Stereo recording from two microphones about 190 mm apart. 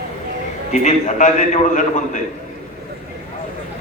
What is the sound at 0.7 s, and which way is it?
A man's voice, 40° left (ahead or behind).